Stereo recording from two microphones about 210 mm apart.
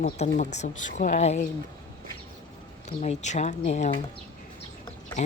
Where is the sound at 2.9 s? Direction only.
35° left (ahead or behind).